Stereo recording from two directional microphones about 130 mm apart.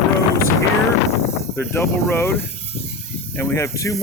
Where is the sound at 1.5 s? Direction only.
20° left (ahead or behind).